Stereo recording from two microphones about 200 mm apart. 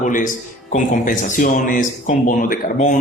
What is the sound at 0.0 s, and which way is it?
A man's voice, 40° left (ahead or behind).